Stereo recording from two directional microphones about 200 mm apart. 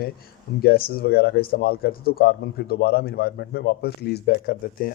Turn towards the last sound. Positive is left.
turn(degrees=45)  # may be behind; listen again after turning